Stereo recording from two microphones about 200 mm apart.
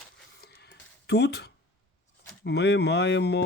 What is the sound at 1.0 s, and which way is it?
Speech, 55° left (ahead or behind).